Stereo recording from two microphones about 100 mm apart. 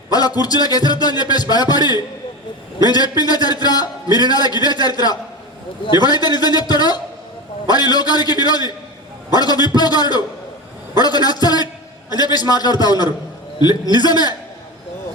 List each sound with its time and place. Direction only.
0.1 s a man's voice: 40° left (ahead or behind)